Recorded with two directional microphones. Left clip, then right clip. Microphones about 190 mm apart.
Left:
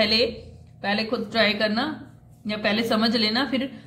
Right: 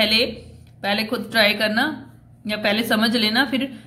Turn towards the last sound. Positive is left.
turn(degrees=-15)  # may be behind; listen again after turning